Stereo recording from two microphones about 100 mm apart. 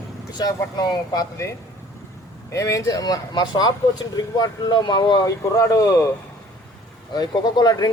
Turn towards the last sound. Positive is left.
turn(degrees=45)  # may be behind; listen again after turning